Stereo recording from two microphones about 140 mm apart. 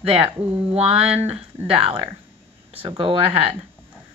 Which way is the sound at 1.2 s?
45° right (ahead or behind).